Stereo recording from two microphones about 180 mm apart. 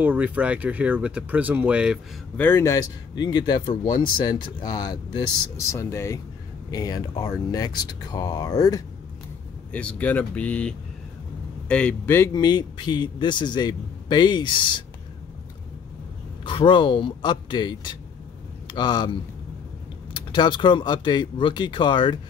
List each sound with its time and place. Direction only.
0.0 s speech: 10° right (ahead or behind)
2.3 s speech: 10° left (ahead or behind)
9.7 s speech: 10° left (ahead or behind); by 14.8 s 25° left (ahead or behind)
16.4 s speech: 25° left (ahead or behind)
20.2 s speech: 25° left (ahead or behind)